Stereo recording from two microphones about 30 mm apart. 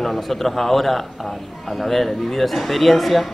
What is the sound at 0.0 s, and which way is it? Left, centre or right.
A man's voice, centre.